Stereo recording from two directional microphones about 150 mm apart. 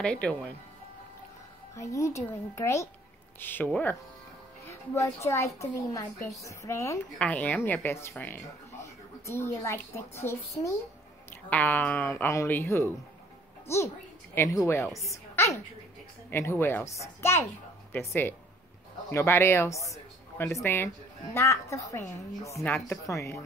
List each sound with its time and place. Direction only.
0.0 s speech: 5° left (ahead or behind)
1.8 s a woman's voice: 20° left (ahead or behind)
9.2 s a woman's voice: 20° left (ahead or behind)
14.3 s a woman's voice: 20° left (ahead or behind)
15.0 s a sound: 20° left (ahead or behind)
16.3 s a woman's voice: 15° left (ahead or behind)